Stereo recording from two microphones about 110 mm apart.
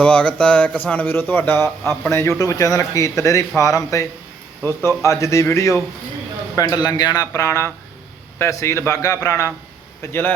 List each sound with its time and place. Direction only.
0.0 s speech: 10° left (ahead or behind)